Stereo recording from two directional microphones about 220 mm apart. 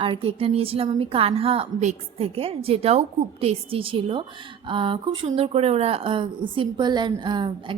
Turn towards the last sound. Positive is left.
turn(degrees=-20)  # may be behind; listen again after turning